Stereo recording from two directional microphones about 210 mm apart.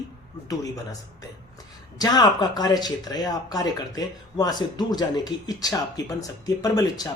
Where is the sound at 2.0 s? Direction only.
20° left (ahead or behind).